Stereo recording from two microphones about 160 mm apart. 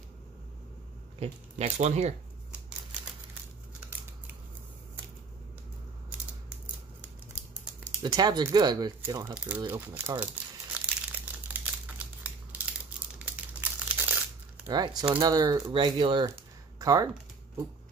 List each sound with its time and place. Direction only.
1.2 s speech: 45° right (ahead or behind)
8.0 s speech: 25° right (ahead or behind)
9.3 s speech: 5° right (ahead or behind)
10.2 s crumpling: 10° right (ahead or behind)
14.7 s speech: 25° right (ahead or behind)
16.3 s a sound: 20° right (ahead or behind)